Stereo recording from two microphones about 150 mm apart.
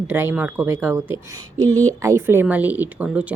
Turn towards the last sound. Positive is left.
turn(degrees=-10)  # may be behind; listen again after turning